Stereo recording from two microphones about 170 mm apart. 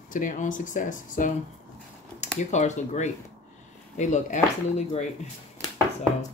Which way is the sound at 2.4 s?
45° left (ahead or behind).